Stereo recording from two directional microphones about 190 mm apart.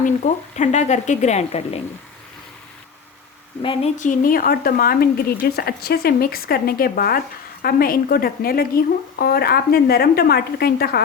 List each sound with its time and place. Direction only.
0.0 s speech: 40° left (ahead or behind)
3.6 s speech: 30° left (ahead or behind); by 11.0 s 55° left (ahead or behind)